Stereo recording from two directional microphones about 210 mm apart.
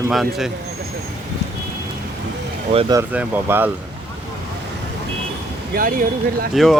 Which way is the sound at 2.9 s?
10° right (ahead or behind).